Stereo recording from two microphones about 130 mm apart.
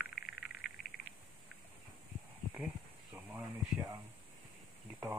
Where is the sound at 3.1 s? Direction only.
15° right (ahead or behind).